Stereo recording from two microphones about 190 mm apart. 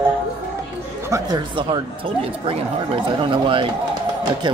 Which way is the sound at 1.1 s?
25° right (ahead or behind).